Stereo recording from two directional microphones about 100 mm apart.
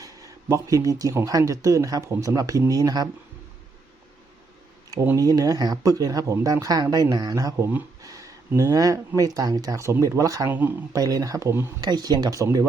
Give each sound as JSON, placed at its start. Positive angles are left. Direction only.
{"t": 0.0, "sound": "speech", "side_deg": -35}
{"t": 5.1, "sound": "speech", "side_deg": -40}
{"t": 10.5, "sound": "speech", "side_deg": -20}
{"t": 10.9, "sound": "speech", "side_deg": -35}
{"t": 11.8, "sound": "speech", "side_deg": -45}